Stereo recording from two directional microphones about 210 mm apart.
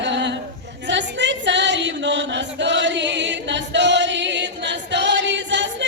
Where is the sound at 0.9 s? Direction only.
55° right (ahead or behind).